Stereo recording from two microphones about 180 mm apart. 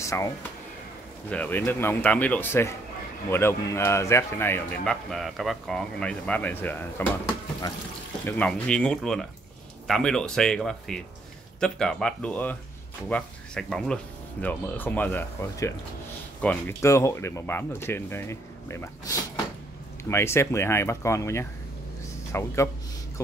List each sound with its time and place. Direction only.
0.0 s speech: 15° left (ahead or behind)
1.3 s speech: 10° left (ahead or behind)
8.3 s speech: 5° left (ahead or behind)